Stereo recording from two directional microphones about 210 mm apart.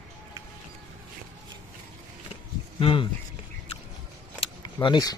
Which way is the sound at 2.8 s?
25° left (ahead or behind).